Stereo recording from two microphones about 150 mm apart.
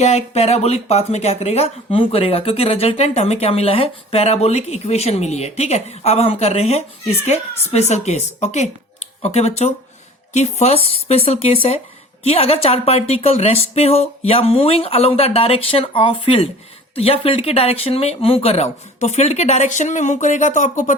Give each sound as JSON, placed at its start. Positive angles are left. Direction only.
{"t": 0.0, "sound": "speech", "side_deg": 45}